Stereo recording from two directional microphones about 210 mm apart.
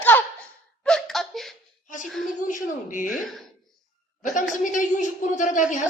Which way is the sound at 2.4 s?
40° left (ahead or behind).